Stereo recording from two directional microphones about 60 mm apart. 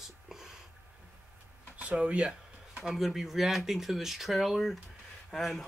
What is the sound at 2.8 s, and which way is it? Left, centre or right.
Speech, centre.